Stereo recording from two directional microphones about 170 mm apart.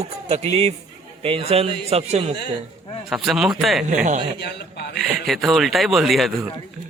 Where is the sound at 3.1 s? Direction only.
Centre (ahead or behind).